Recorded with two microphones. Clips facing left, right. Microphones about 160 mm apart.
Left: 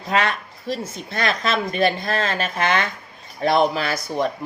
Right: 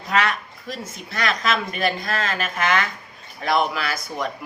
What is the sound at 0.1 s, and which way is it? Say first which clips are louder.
Speech: left 1 dB; 35° left (ahead or behind).